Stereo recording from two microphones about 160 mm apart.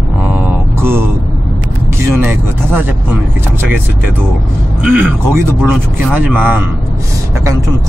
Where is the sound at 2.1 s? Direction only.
10° right (ahead or behind).